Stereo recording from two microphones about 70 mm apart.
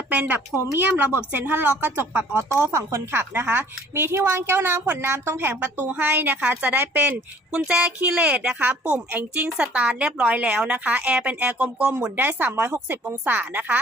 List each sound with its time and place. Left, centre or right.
0.1 s a sound: right
0.7 s speech: right
5.4 s speech: right